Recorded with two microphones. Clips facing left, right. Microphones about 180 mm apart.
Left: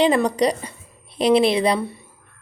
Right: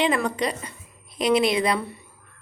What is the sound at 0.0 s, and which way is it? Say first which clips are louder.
A woman's voice: left 6 dB; 35° left (ahead or behind).